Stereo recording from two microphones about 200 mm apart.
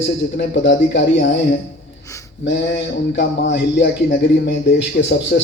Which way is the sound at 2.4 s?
60° left (ahead or behind).